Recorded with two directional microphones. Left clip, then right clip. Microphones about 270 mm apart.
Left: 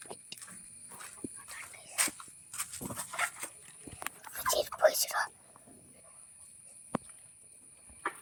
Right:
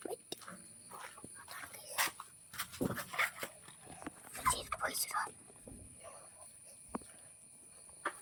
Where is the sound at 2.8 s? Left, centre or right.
Right.